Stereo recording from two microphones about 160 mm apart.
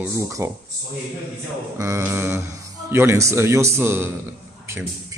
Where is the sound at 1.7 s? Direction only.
20° right (ahead or behind).